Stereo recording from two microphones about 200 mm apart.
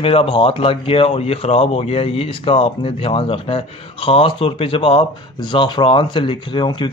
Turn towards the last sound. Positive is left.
turn(degrees=25)  # may be behind; listen again after turning